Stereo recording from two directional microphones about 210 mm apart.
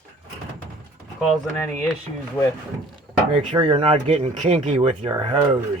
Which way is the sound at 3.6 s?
25° right (ahead or behind).